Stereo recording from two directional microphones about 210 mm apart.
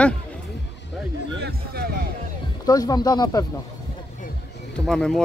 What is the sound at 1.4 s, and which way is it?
Speech, 50° right (ahead or behind).